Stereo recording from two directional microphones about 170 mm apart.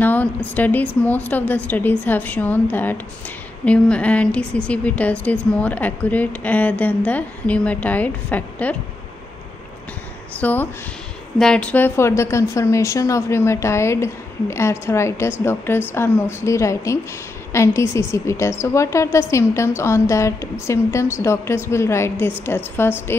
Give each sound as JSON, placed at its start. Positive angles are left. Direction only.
{"t": 0.0, "sound": "a woman's voice", "side_deg": 10}
{"t": 10.4, "sound": "a woman's voice", "side_deg": 10}